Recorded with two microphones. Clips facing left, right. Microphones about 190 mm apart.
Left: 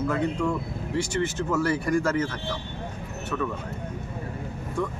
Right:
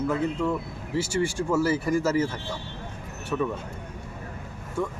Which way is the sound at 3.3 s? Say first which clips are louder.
Right 2 dB; 20° right (ahead or behind).